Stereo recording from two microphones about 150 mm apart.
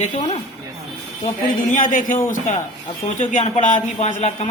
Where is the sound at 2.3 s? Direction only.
55° left (ahead or behind).